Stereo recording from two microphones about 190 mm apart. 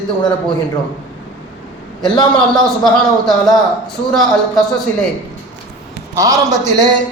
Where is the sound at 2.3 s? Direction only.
5° left (ahead or behind).